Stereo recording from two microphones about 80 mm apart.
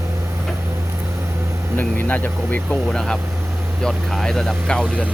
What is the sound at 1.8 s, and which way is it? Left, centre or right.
Speech, left.